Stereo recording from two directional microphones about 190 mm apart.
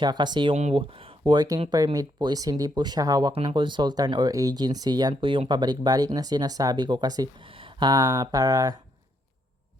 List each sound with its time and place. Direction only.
0.0 s speech: 25° right (ahead or behind)